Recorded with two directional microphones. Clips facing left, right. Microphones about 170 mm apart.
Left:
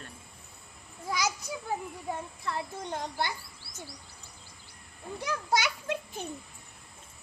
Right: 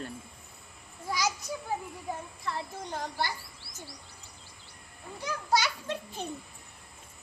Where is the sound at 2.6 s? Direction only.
20° left (ahead or behind).